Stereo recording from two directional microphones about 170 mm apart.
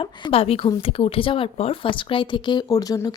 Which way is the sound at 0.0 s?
35° left (ahead or behind).